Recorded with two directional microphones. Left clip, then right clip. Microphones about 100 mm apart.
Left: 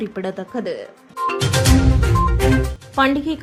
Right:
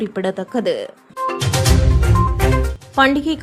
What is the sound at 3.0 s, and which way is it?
Speech, 20° right (ahead or behind).